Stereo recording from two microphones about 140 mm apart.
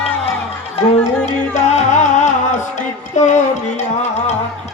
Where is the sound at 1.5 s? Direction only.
55° left (ahead or behind).